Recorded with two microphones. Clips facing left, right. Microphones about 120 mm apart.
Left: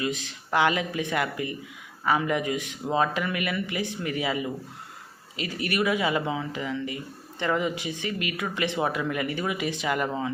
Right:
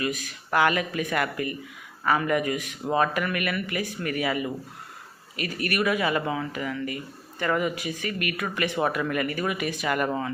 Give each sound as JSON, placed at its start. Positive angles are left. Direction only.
{"t": 0.0, "sound": "speech", "side_deg": 25}